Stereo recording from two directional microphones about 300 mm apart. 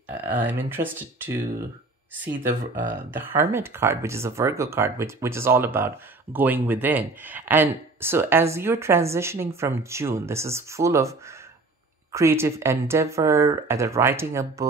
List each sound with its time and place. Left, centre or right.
0.2 s speech: centre
2.7 s speech: right
3.1 s speech: centre